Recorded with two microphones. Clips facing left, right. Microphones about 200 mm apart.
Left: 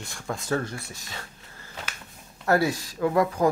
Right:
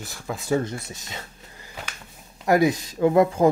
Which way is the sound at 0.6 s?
20° right (ahead or behind).